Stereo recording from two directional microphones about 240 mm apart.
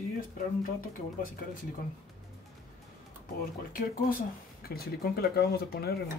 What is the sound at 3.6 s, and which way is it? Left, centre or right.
Speech, left.